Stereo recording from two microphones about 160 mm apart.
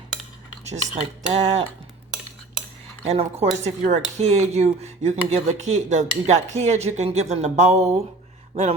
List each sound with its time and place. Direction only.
0.7 s speech: 45° right (ahead or behind)
3.0 s speech: 40° right (ahead or behind)